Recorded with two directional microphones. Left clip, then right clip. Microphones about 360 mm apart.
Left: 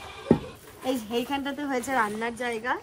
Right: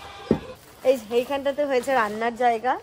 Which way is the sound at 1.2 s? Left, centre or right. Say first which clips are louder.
Right 6 dB; centre.